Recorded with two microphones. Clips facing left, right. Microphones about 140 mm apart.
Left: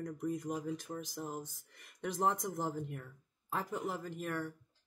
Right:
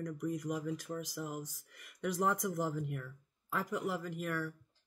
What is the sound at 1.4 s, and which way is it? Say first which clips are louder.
Speech: right 1 dB; 30° left (ahead or behind).